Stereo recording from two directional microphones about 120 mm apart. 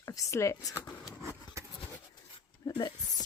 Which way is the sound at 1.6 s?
25° right (ahead or behind).